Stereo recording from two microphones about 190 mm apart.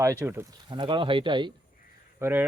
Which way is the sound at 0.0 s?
15° right (ahead or behind).